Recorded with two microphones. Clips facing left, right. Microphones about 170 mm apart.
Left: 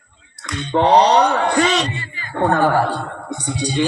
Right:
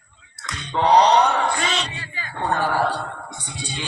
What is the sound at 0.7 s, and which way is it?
Speech, 55° left (ahead or behind).